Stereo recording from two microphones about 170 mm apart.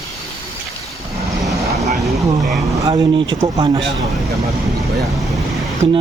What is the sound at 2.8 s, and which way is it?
Speech, 25° right (ahead or behind).